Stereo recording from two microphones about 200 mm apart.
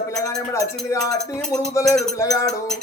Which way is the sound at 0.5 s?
15° left (ahead or behind).